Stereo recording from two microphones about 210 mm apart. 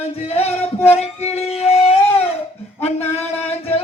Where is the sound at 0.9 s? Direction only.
30° left (ahead or behind).